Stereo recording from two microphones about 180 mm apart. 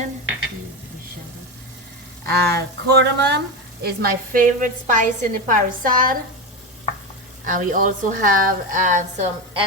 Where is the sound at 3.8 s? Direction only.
55° right (ahead or behind).